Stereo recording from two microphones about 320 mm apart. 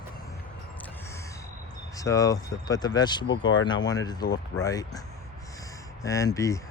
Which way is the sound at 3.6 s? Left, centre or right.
Centre.